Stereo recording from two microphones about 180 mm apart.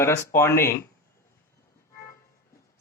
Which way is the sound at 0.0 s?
15° left (ahead or behind).